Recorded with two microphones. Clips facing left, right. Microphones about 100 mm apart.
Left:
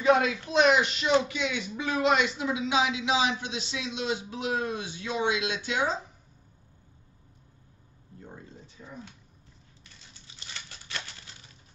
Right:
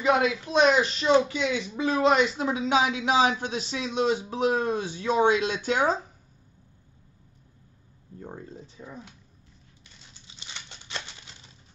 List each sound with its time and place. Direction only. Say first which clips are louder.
0.5 s speech: right 1 dB; 30° right (ahead or behind); by 5.9 s 45° right (ahead or behind)
8.8 s a sound: right 2 dB; 45° right (ahead or behind)
10.2 s patter: right 1 dB; 20° right (ahead or behind)